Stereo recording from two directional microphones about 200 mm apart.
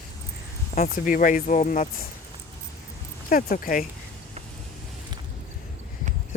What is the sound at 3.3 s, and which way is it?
Speech, 45° left (ahead or behind).